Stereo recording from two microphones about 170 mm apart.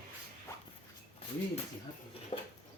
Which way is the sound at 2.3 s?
30° left (ahead or behind).